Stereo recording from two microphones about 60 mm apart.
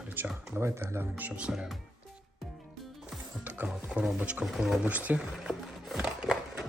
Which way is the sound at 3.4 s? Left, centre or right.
Right.